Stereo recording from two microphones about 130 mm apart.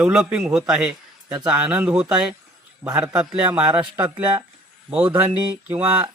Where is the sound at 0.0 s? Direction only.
5° right (ahead or behind).